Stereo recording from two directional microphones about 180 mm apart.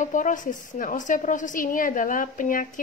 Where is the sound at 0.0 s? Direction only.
45° left (ahead or behind).